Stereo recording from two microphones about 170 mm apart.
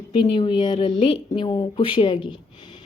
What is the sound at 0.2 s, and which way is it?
A woman's voice, 30° left (ahead or behind).